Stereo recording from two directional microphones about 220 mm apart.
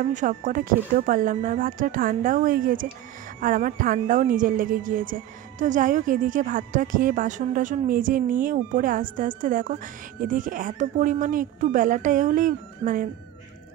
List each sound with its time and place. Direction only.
0.1 s a woman's voice: 35° right (ahead or behind)